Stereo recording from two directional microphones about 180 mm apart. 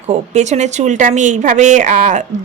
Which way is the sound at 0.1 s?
40° right (ahead or behind).